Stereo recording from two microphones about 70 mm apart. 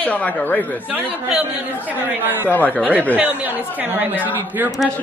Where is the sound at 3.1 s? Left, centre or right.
Right.